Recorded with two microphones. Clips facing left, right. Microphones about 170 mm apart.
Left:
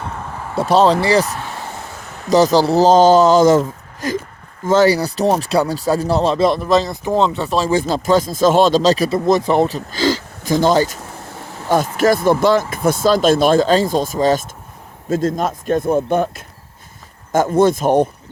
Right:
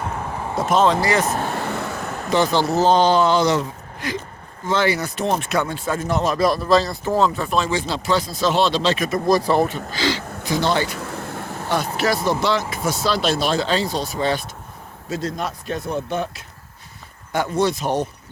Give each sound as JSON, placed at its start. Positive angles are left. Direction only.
{"t": 0.5, "sound": "speech", "side_deg": 30}
{"t": 1.2, "sound": "speech", "side_deg": -35}
{"t": 1.5, "sound": "vehicle", "side_deg": -70}
{"t": 2.3, "sound": "speech", "side_deg": 40}
{"t": 9.6, "sound": "speech", "side_deg": 40}